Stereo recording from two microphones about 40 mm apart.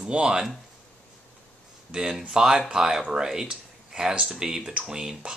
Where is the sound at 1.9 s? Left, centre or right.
Right.